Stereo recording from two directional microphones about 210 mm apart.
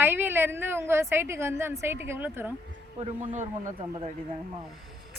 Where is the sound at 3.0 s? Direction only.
30° right (ahead or behind).